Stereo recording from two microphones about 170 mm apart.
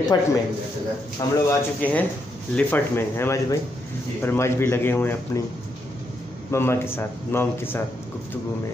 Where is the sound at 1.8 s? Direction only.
10° left (ahead or behind).